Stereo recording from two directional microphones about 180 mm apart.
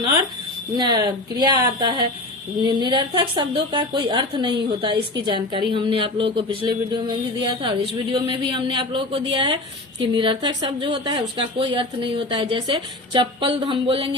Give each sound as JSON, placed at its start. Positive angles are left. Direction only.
{"t": 0.9, "sound": "speech", "side_deg": -20}